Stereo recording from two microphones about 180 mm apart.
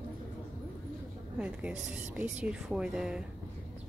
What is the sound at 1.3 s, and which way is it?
A woman's voice, 5° right (ahead or behind).